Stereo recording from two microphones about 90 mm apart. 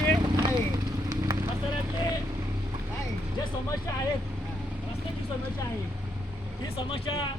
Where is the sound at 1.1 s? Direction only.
40° right (ahead or behind).